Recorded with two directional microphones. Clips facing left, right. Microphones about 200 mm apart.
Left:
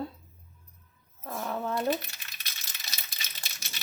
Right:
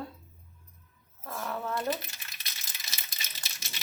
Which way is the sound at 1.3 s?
20° left (ahead or behind).